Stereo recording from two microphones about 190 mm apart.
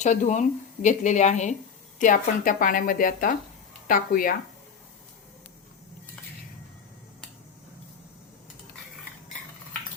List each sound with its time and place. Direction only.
0.0 s a woman's voice: 40° left (ahead or behind)